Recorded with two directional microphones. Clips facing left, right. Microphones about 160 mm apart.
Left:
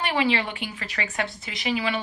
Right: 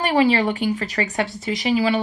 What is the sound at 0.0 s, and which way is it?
Speech, 40° right (ahead or behind).